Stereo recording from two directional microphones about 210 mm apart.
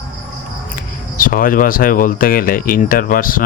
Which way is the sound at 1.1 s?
40° left (ahead or behind).